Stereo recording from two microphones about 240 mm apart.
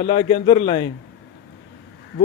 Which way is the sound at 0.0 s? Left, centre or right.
Left.